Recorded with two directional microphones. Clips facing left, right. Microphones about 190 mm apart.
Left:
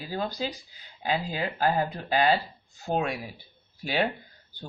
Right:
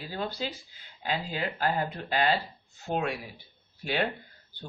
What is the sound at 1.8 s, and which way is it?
Speech, 40° left (ahead or behind).